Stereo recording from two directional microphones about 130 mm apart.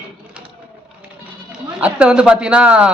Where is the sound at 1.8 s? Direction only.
10° right (ahead or behind).